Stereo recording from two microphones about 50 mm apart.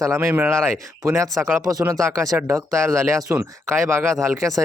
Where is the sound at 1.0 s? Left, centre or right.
Right.